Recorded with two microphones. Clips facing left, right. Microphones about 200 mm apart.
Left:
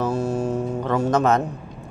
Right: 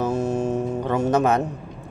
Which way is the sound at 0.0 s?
20° right (ahead or behind).